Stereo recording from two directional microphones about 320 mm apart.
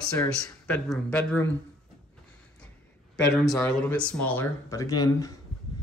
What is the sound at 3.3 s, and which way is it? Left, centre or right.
Speech, centre.